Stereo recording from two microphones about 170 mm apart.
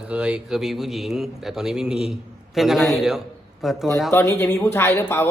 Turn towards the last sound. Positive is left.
turn(degrees=15)  # may be behind; listen again after turning